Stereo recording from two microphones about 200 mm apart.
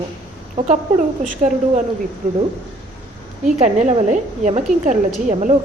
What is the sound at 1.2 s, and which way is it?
Speech, 40° right (ahead or behind).